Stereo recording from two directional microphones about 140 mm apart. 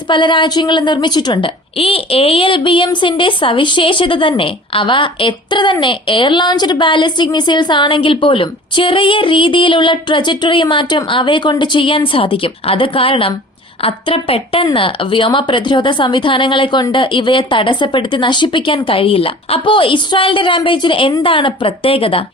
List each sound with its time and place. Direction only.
0.1 s a woman's voice: 35° left (ahead or behind)